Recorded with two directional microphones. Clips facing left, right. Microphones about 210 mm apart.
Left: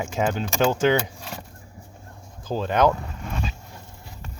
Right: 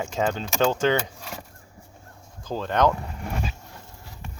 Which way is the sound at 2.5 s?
10° left (ahead or behind).